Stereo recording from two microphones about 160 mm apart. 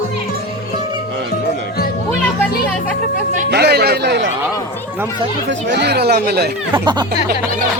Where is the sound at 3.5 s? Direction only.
90° right.